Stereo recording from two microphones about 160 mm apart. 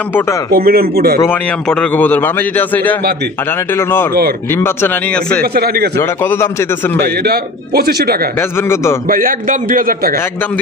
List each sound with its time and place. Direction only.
0.5 s speech: 70° right (ahead or behind)
1.7 s a man's voice: 10° left (ahead or behind)
5.4 s speech: 75° right (ahead or behind)
5.9 s a man's voice: 15° left (ahead or behind)
7.2 s speech: 80° right
8.4 s a man's voice: 15° left (ahead or behind)
9.1 s a man's voice: 60° right (ahead or behind)